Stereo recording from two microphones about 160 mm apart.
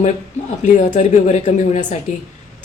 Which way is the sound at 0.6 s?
50° left (ahead or behind).